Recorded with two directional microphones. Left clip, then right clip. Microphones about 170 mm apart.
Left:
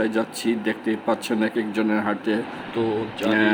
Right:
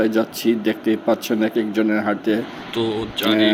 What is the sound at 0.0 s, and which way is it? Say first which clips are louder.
Speech: right 4 dB; 10° right (ahead or behind).